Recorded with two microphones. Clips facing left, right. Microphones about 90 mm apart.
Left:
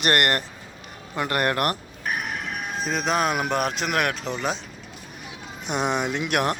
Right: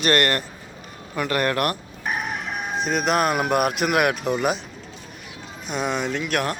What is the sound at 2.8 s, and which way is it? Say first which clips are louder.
Speech: right 2 dB; centre (ahead or behind).